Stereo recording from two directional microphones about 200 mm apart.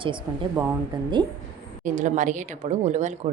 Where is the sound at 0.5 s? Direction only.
10° right (ahead or behind).